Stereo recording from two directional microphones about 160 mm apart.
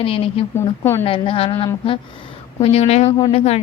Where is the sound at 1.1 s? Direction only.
30° left (ahead or behind).